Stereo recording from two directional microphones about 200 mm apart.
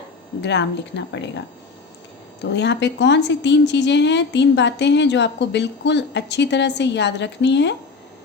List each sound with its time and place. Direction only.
0.4 s a woman's voice: 60° left (ahead or behind)
2.4 s a woman's voice: 60° left (ahead or behind)